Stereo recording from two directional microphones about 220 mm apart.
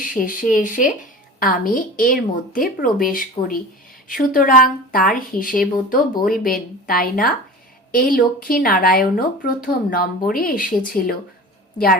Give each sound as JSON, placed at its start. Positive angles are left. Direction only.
{"t": 0.0, "sound": "speech", "side_deg": 40}